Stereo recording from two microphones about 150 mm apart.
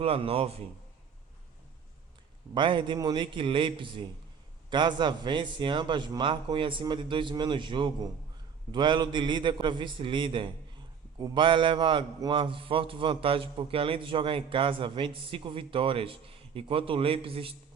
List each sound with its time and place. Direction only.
0.0 s a man's voice: 40° right (ahead or behind)
2.6 s a man's voice: 30° right (ahead or behind)